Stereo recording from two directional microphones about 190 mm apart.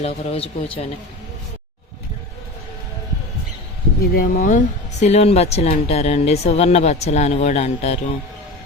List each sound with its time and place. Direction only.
0.0 s speech: 30° left (ahead or behind)
4.1 s speech: 50° left (ahead or behind); by 7.9 s 35° left (ahead or behind)